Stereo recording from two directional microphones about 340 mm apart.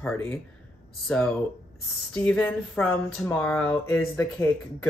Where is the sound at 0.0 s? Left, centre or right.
Centre.